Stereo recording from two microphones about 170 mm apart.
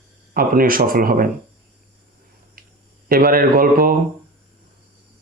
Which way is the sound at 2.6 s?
55° right (ahead or behind).